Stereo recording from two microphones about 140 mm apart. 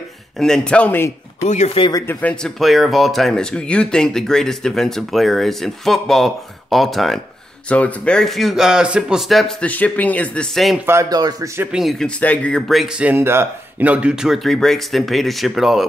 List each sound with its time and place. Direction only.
0.4 s speech: 5° left (ahead or behind)
1.4 s speech: 55° left (ahead or behind)
1.8 s speech: 30° left (ahead or behind)
2.0 s speech: 5° left (ahead or behind)
10.9 s a man's voice: 25° right (ahead or behind)
11.7 s speech: centre (ahead or behind)